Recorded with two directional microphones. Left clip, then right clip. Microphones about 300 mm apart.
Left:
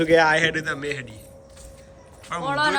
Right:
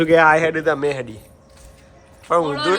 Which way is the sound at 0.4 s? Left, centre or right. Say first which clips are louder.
Right 5 dB; centre.